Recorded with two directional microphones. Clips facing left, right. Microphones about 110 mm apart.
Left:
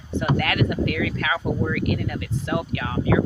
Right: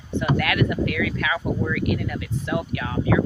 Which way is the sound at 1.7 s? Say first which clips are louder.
Even; 45° left (ahead or behind).